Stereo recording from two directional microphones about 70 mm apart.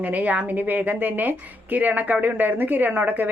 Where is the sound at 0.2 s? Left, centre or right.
Right.